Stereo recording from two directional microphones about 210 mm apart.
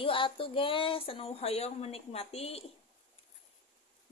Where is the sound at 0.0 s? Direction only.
25° left (ahead or behind).